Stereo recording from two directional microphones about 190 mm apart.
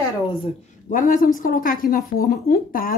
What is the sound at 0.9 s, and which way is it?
A woman's voice, 45° left (ahead or behind).